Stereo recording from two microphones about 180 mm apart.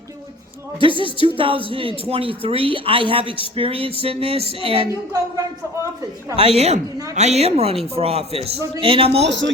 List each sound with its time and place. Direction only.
0.8 s a man's voice: 30° right (ahead or behind)
5.1 s speech: 20° right (ahead or behind)
6.4 s a man's voice: 35° right (ahead or behind)
9.2 s speech: 80° right